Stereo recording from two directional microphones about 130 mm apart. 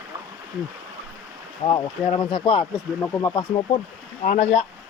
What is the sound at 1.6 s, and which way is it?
Speech, 40° left (ahead or behind).